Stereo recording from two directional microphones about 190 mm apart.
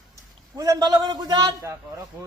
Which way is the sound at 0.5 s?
20° right (ahead or behind).